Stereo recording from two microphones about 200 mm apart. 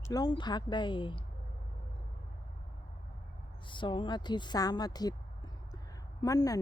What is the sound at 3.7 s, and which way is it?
A woman's voice, 25° left (ahead or behind).